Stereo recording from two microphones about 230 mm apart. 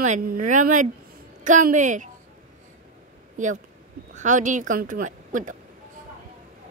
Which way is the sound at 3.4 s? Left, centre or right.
Right.